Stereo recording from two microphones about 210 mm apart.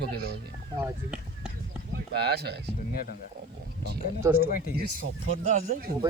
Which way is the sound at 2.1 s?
50° right (ahead or behind).